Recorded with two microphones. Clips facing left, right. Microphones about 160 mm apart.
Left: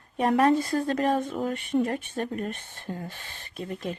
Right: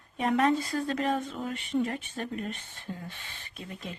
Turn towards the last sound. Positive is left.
turn(degrees=45)  # may be behind; listen again after turning